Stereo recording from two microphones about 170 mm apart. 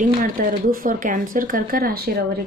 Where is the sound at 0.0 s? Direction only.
55° right (ahead or behind).